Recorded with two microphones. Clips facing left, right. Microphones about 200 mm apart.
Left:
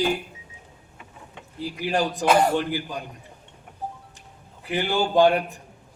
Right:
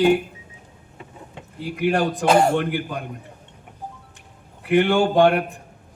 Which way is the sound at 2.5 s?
55° right (ahead or behind).